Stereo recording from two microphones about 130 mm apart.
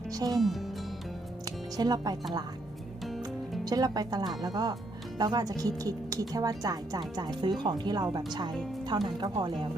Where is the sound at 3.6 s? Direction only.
30° right (ahead or behind).